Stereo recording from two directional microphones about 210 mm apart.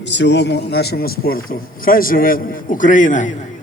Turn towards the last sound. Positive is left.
turn(degrees=35)  # may be behind; listen again after turning